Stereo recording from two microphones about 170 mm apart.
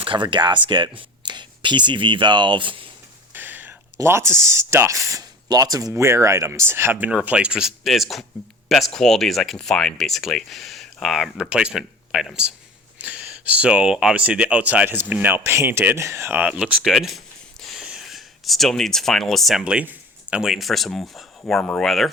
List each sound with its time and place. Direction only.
0.0 s speech: 30° right (ahead or behind)
3.3 s speech: 10° right (ahead or behind)